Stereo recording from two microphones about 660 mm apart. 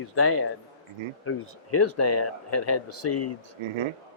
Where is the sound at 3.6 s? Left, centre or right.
Right.